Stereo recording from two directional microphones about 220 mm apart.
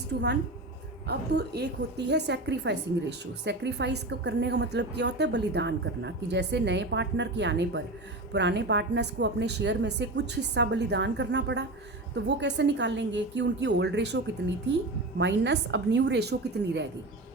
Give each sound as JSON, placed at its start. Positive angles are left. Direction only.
{"t": 1.0, "sound": "a woman's voice", "side_deg": -50}
{"t": 15.2, "sound": "a woman's voice", "side_deg": -55}